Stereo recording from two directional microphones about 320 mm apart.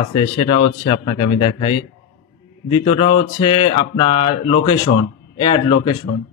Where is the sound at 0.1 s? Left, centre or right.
Centre.